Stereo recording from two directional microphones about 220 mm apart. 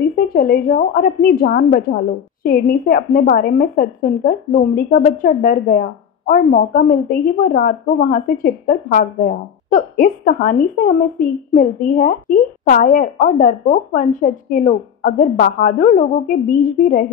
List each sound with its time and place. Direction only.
0.3 s a woman's voice: 40° left (ahead or behind)